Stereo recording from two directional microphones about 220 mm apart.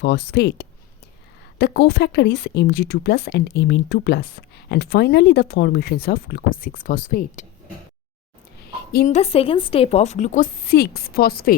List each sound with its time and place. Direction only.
0.0 s speech: 50° left (ahead or behind)
8.9 s a woman's voice: 45° left (ahead or behind)
9.1 s a woman's voice: 25° left (ahead or behind); by 11.5 s 40° left (ahead or behind)